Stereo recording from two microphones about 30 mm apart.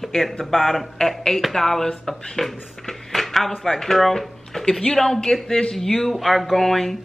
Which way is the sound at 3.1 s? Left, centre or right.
Centre.